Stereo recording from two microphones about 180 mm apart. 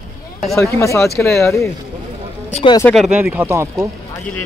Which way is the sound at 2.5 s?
30° left (ahead or behind).